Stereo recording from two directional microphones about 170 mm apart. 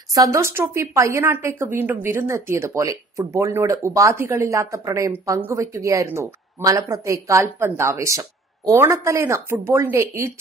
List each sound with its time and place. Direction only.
0.1 s speech: 20° right (ahead or behind)